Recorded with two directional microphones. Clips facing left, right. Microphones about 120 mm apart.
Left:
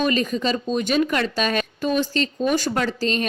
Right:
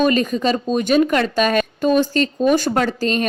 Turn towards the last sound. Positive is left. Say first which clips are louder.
# right 4 dB
turn(degrees=-45)  # may be behind; listen again after turning